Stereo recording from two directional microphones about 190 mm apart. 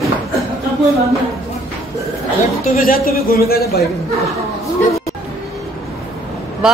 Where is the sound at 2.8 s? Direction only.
50° left (ahead or behind).